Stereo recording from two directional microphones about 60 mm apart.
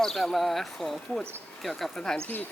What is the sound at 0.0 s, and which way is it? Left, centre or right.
Speech, centre.